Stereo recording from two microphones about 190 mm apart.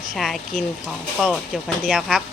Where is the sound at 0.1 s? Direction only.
Centre (ahead or behind).